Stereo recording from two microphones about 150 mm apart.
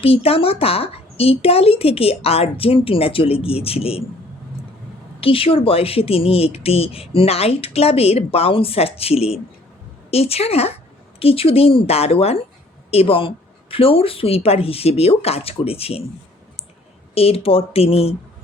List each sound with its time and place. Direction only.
0.0 s speech: 40° left (ahead or behind)
5.2 s a woman's voice: 40° left (ahead or behind)
17.2 s speech: 40° left (ahead or behind)